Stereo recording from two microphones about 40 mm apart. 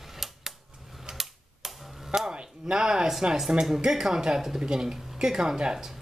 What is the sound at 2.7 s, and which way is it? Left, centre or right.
Speech, centre.